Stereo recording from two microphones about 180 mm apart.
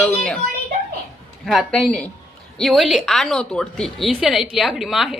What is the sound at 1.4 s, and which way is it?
A woman's voice, centre (ahead or behind).